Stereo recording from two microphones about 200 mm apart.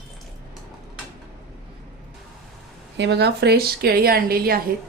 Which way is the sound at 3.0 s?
60° right (ahead or behind).